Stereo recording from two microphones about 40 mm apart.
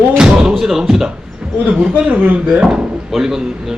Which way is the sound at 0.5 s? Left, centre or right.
Centre.